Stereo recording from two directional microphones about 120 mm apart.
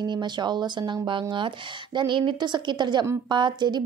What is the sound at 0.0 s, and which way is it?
A woman's voice, 40° right (ahead or behind).